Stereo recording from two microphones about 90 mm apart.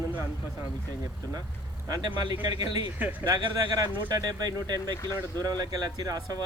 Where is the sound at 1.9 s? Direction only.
55° right (ahead or behind).